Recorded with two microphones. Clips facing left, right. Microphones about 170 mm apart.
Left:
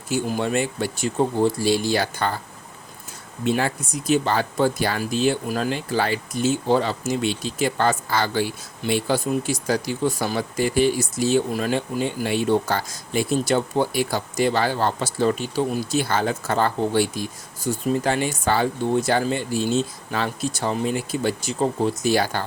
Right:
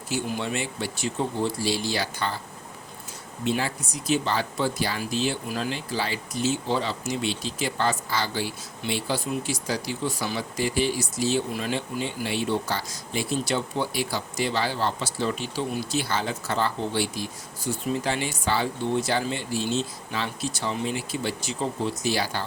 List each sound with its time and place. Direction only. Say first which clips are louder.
0.1 s speech: left 6 dB; 45° left (ahead or behind)
3.4 s speech: left 4 dB; 50° left (ahead or behind)